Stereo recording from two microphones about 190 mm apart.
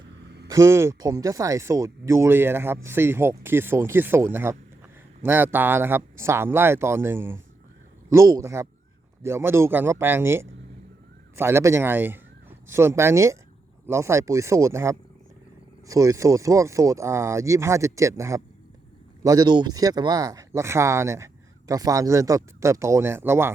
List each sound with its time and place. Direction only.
0.4 s speech: 15° right (ahead or behind)